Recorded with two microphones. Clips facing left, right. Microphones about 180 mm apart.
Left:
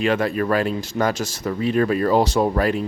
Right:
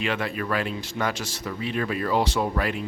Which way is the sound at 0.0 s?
40° left (ahead or behind).